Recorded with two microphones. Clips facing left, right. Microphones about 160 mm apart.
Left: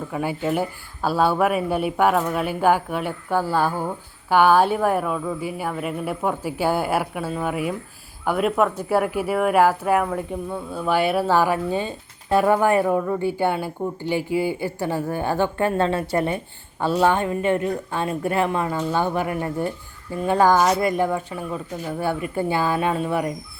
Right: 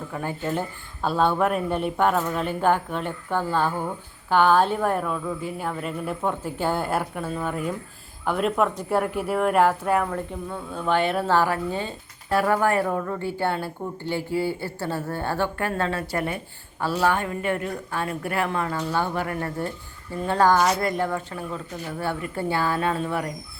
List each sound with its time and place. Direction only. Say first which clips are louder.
0.1 s speech: left 4 dB; 10° left (ahead or behind)